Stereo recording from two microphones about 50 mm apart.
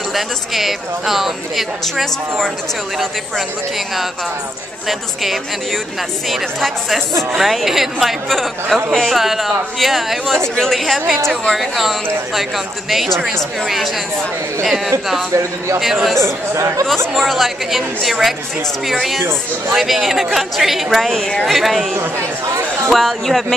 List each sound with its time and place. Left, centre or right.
0.1 s speech: centre
4.8 s speech: centre
15.8 s speech: centre
16.2 s speech: right
17.1 s speech: centre
19.7 s speech: centre
21.1 s speech: centre
21.5 s speech: centre
22.8 s speech: centre